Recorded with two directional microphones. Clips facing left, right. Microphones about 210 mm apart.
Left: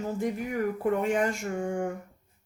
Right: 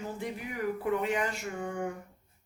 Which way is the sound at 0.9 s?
45° left (ahead or behind).